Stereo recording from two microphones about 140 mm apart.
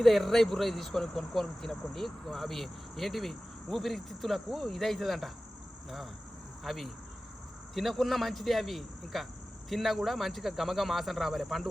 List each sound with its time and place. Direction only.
0.0 s speech: centre (ahead or behind)
6.7 s speech: centre (ahead or behind)